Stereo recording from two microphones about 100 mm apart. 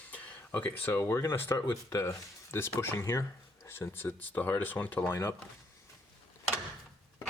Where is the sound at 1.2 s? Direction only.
25° left (ahead or behind).